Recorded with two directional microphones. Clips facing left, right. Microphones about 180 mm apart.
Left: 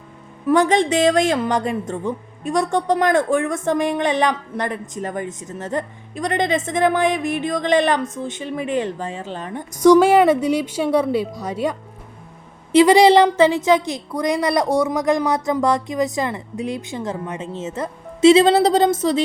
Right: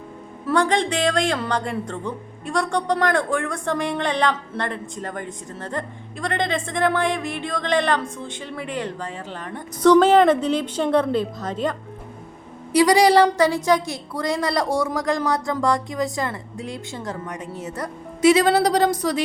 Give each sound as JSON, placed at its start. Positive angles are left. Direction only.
{"t": 0.4, "sound": "a woman's voice", "side_deg": 20}
{"t": 12.7, "sound": "a woman's voice", "side_deg": 20}